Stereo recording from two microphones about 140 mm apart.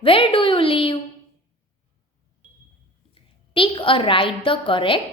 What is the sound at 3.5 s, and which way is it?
A woman's voice, 40° left (ahead or behind).